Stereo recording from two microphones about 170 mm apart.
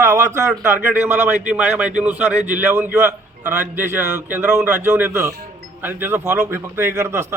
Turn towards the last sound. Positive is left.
turn(degrees=-15)  # may be behind; listen again after turning